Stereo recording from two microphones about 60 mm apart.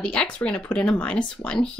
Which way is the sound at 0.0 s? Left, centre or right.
Centre.